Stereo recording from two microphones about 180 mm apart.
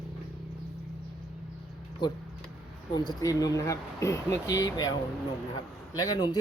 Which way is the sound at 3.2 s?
20° left (ahead or behind).